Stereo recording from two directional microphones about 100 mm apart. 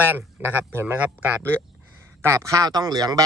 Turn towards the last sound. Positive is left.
turn(degrees=-40)  # may be behind; listen again after turning